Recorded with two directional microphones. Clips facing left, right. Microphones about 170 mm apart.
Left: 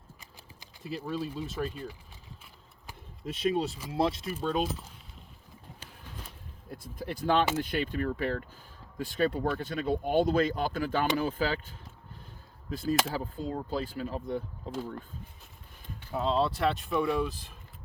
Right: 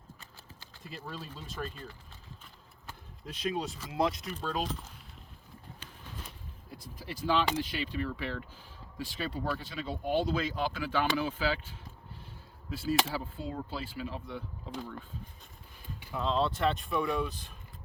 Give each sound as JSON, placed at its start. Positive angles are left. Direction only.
{"t": 0.2, "sound": "speech", "side_deg": 15}
{"t": 3.2, "sound": "speech", "side_deg": 30}
{"t": 4.3, "sound": "speech", "side_deg": 10}
{"t": 7.0, "sound": "speech", "side_deg": 50}
{"t": 16.6, "sound": "speech", "side_deg": 0}